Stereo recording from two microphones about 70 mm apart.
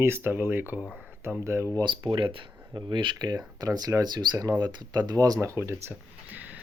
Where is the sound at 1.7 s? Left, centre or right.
Right.